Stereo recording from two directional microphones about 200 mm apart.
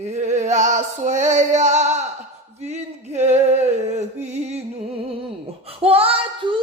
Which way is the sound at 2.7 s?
35° right (ahead or behind).